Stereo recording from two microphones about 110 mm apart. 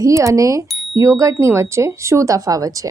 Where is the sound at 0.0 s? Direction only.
30° right (ahead or behind).